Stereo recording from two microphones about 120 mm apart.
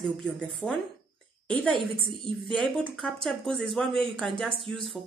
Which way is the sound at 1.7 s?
45° right (ahead or behind).